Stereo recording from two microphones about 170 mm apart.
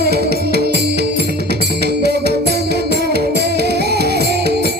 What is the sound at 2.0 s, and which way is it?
Music, 75° right (ahead or behind).